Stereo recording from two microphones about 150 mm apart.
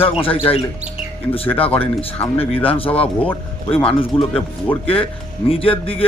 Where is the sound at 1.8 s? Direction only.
40° left (ahead or behind).